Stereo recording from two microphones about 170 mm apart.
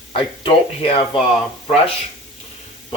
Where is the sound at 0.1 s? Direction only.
30° left (ahead or behind).